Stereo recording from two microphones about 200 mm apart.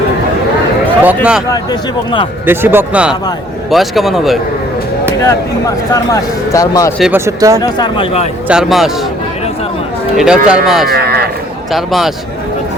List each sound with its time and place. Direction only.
1.0 s speech: 5° right (ahead or behind)
2.5 s speech: 10° right (ahead or behind)
5.2 s speech: 15° left (ahead or behind)
7.0 s speech: 10° right (ahead or behind)
7.6 s speech: 25° left (ahead or behind)
8.4 s speech: centre (ahead or behind)
10.2 s speech: centre (ahead or behind)
10.9 s speech: 50° right (ahead or behind)
11.7 s speech: centre (ahead or behind)